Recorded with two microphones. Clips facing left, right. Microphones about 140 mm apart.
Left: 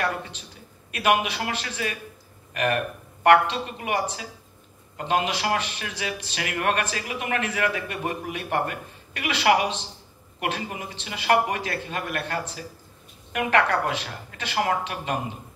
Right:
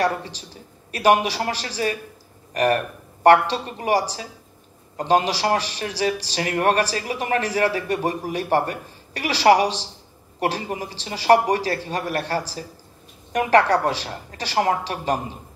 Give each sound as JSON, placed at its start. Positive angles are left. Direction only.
{"t": 0.0, "sound": "a man's voice", "side_deg": -35}